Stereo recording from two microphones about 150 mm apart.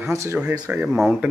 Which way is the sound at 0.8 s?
Centre (ahead or behind).